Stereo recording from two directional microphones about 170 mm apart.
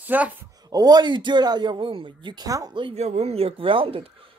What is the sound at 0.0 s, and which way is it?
Speech, 10° right (ahead or behind).